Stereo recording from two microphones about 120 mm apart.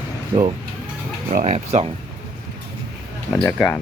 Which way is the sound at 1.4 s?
80° right.